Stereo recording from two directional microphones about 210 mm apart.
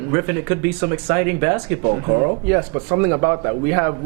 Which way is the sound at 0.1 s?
15° right (ahead or behind).